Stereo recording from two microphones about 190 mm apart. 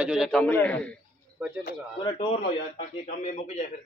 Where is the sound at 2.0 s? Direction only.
25° left (ahead or behind).